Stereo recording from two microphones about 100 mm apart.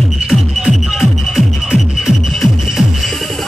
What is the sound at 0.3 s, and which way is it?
Music, centre (ahead or behind).